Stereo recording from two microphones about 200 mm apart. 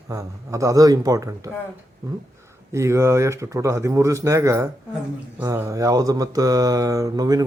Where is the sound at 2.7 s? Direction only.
15° right (ahead or behind).